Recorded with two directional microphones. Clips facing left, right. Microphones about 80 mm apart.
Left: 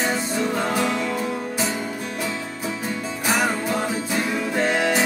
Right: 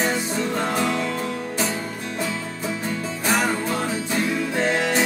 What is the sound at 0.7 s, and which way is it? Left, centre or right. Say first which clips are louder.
Music: even; centre.